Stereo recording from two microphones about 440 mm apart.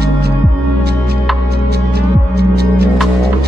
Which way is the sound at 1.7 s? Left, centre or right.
Right.